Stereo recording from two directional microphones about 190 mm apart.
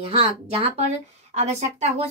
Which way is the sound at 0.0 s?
30° right (ahead or behind).